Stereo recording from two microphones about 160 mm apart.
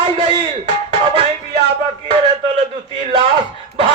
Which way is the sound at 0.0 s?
30° right (ahead or behind).